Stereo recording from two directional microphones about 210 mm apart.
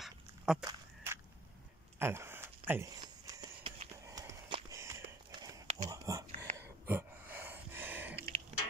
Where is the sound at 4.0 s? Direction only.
15° right (ahead or behind).